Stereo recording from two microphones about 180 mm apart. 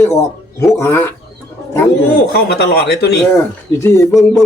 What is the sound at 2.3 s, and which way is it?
Speech, 60° left (ahead or behind).